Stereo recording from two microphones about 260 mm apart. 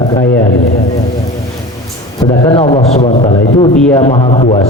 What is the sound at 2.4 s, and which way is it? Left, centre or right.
A man's voice, centre.